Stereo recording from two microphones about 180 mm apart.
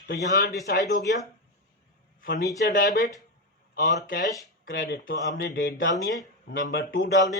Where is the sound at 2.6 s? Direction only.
60° left (ahead or behind).